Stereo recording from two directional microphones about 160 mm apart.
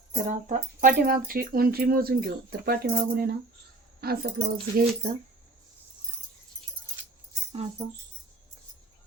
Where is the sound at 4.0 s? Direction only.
75° right (ahead or behind).